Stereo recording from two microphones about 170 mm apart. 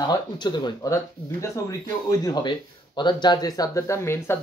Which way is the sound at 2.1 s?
20° left (ahead or behind).